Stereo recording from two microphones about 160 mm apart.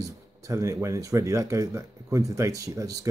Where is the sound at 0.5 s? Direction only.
20° right (ahead or behind).